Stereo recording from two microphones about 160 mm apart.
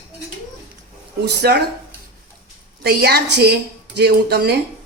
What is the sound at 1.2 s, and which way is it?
Speech, 90° right.